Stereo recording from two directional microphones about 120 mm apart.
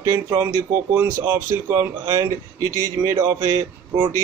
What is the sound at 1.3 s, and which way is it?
Speech, 15° right (ahead or behind).